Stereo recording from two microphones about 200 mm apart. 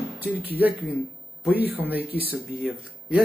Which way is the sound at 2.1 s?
50° left (ahead or behind).